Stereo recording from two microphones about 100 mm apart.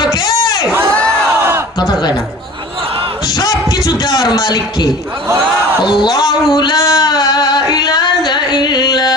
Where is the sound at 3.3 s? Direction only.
40° left (ahead or behind).